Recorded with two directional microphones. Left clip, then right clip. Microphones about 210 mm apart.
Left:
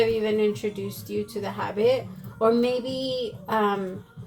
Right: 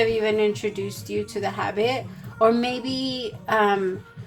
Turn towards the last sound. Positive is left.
turn(degrees=-35)  # may be behind; listen again after turning